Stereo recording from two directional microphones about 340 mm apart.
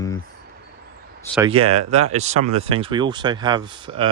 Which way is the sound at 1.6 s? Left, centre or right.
Right.